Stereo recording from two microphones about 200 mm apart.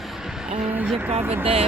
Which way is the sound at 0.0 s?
Centre (ahead or behind).